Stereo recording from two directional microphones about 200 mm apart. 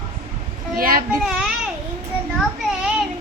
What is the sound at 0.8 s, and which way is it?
Speech, 45° right (ahead or behind).